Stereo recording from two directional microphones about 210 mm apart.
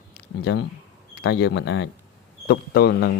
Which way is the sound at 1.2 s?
60° left (ahead or behind).